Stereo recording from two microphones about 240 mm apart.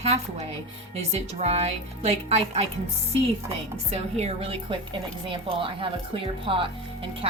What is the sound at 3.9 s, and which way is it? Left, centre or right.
A woman's voice, right.